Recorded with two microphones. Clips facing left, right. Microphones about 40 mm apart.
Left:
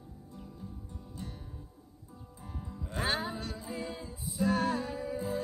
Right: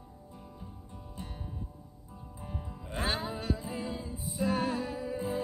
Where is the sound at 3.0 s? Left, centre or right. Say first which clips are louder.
Left 1 dB; centre.